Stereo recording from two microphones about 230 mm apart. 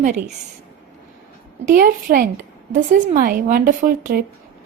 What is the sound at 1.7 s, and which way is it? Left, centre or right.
A woman's voice, right.